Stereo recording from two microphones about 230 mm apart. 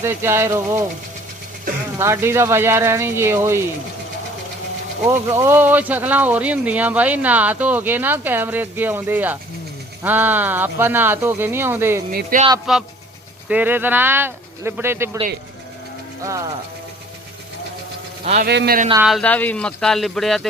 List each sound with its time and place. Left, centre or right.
0.0 s speech: centre
2.0 s speech: centre
5.0 s speech: centre
12.1 s speech: right
12.7 s speech: centre
18.4 s a man's voice: right
19.0 s speech: centre